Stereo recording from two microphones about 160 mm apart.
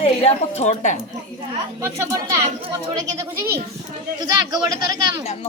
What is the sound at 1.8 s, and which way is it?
Speech, 20° right (ahead or behind).